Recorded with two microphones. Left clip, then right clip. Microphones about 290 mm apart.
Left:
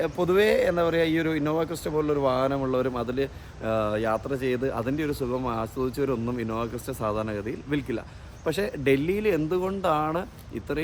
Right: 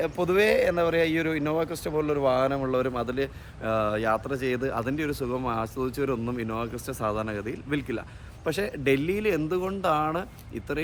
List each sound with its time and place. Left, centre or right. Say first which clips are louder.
0.0 s speech: left 1 dB; centre